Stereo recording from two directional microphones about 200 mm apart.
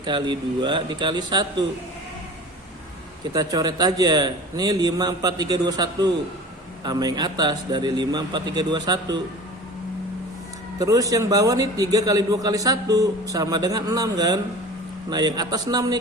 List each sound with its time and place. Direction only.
0.0 s a man's voice: 20° right (ahead or behind)
3.3 s a man's voice: 20° right (ahead or behind)
10.8 s a man's voice: 15° right (ahead or behind)